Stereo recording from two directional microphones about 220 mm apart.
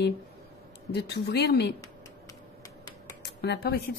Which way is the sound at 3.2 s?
45° left (ahead or behind).